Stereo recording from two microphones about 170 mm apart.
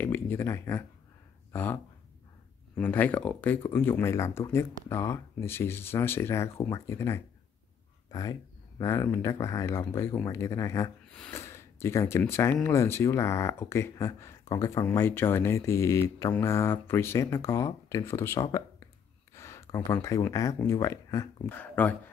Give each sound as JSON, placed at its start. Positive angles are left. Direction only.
{"t": 0.0, "sound": "speech", "side_deg": 10}
{"t": 11.1, "sound": "speech", "side_deg": 5}